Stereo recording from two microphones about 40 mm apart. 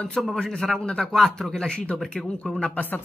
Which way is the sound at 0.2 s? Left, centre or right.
Centre.